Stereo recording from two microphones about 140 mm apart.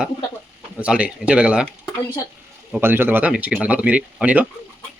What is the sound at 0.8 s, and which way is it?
Speech, 10° right (ahead or behind).